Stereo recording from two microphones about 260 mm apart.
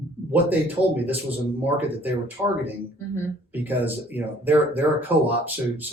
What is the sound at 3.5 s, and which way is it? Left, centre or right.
Speech, centre.